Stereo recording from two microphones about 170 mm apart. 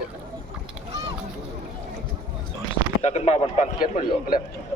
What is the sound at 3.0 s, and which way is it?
A man's voice, 40° left (ahead or behind).